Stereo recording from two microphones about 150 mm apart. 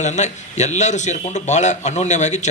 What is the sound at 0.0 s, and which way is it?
A man's voice, 50° left (ahead or behind).